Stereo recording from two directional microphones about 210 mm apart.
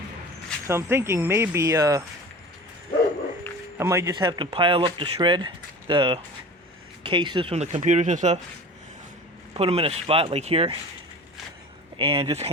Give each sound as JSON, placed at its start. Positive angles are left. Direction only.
{"t": 0.7, "sound": "speech", "side_deg": -10}
{"t": 3.8, "sound": "speech", "side_deg": -15}
{"t": 9.6, "sound": "speech", "side_deg": -25}
{"t": 11.9, "sound": "speech", "side_deg": -30}